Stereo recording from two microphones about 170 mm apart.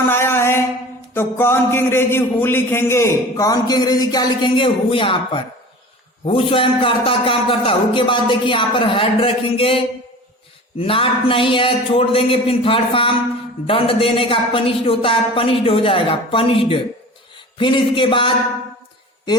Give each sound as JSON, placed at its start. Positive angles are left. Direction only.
{"t": 0.1, "sound": "a man's voice", "side_deg": 15}